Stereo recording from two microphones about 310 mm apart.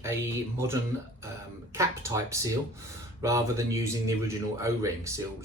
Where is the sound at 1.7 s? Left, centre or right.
Centre.